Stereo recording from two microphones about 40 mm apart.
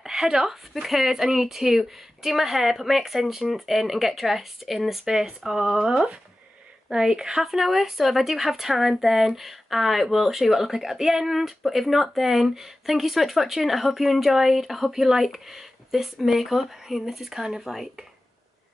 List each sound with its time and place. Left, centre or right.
0.0 s speech: centre